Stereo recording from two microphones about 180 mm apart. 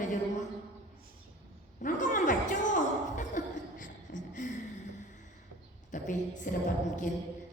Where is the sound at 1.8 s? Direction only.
45° left (ahead or behind).